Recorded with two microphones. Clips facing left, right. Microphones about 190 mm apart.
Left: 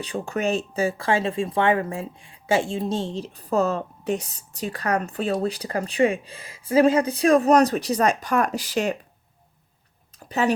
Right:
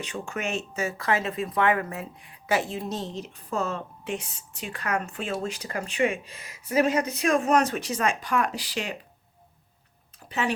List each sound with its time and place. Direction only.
0.0 s speech: 35° left (ahead or behind)
10.2 s speech: 40° left (ahead or behind)